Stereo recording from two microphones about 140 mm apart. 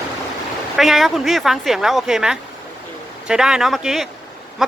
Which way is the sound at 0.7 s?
Centre (ahead or behind).